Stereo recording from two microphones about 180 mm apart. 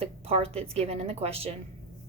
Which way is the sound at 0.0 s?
30° right (ahead or behind).